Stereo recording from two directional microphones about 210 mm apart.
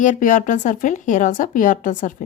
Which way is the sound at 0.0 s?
40° left (ahead or behind).